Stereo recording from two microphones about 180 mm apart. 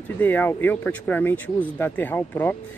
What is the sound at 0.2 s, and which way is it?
Speech, 10° left (ahead or behind).